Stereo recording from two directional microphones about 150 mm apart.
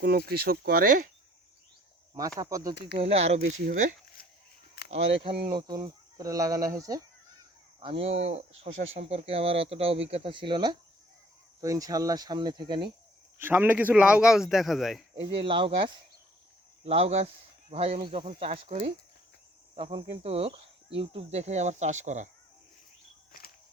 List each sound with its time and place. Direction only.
0.0 s speech: 90° right; by 1.0 s 75° right (ahead or behind)
2.4 s speech: 20° right (ahead or behind)
2.8 s speech: 40° right (ahead or behind)
3.7 s speech: 65° right (ahead or behind)
5.5 s speech: 30° right (ahead or behind)
7.8 s speech: 35° right (ahead or behind)
13.4 s speech: 15° right (ahead or behind)
15.1 s speech: 35° right (ahead or behind); by 22.3 s 50° right (ahead or behind)